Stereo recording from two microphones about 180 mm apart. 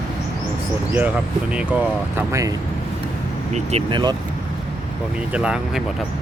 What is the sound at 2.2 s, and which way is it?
Speech, 15° right (ahead or behind).